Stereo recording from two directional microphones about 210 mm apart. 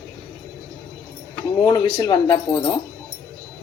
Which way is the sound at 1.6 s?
20° left (ahead or behind).